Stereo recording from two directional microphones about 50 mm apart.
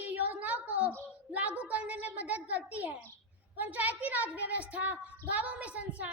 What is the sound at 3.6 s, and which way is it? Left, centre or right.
A woman's voice, right.